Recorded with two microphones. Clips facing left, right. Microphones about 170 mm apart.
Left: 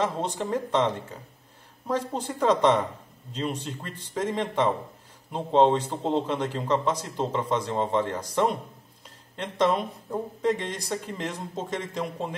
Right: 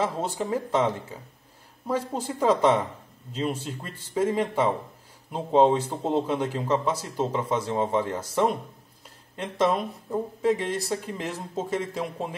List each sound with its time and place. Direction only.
0.0 s a man's voice: 5° right (ahead or behind)